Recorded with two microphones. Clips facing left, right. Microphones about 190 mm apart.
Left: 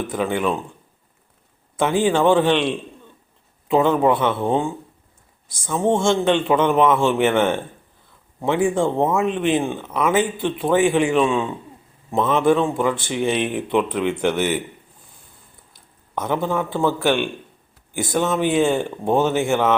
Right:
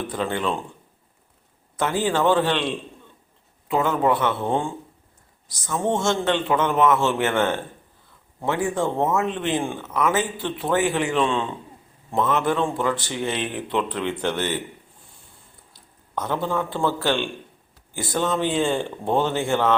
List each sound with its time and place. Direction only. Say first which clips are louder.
0.1 s a man's voice: left 4 dB; 10° left (ahead or behind)
1.8 s a man's voice: left 4 dB; 20° left (ahead or behind)
5.6 s a man's voice: left 4 dB; 20° left (ahead or behind)
12.1 s speech: left 3 dB; 25° left (ahead or behind)
12.5 s a man's voice: left 5 dB; 10° left (ahead or behind)
16.2 s a man's voice: left 3 dB; 10° left (ahead or behind)